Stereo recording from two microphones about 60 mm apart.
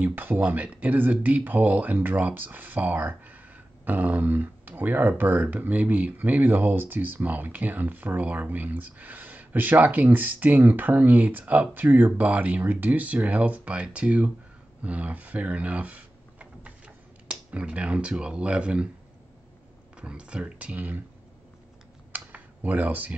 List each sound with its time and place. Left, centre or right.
0.0 s speech: right; by 18.9 s centre
20.0 s speech: centre
22.1 s computer keyboard: right